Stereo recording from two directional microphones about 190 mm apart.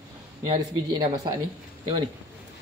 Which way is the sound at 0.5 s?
25° right (ahead or behind).